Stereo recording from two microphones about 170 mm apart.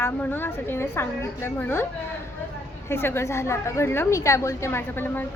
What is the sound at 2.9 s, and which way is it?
A woman's voice, 15° left (ahead or behind).